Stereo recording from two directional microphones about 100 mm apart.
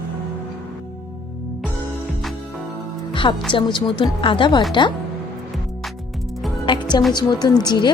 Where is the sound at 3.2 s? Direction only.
70° left (ahead or behind).